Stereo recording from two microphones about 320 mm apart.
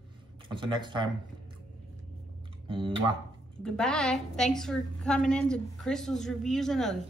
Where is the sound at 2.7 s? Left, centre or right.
Centre.